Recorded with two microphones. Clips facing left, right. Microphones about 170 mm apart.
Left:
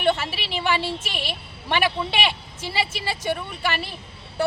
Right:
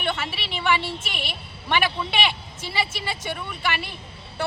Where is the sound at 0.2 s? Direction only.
40° left (ahead or behind).